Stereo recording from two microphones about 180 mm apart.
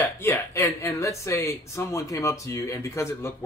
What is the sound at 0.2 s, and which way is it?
A man's voice, 15° left (ahead or behind).